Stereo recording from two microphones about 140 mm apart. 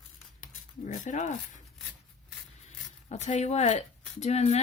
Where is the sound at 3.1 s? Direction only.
55° left (ahead or behind).